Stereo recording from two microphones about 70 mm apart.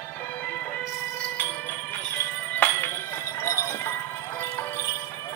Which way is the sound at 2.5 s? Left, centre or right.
Left.